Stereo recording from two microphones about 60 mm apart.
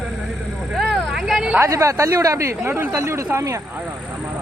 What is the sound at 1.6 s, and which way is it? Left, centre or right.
Speech, right.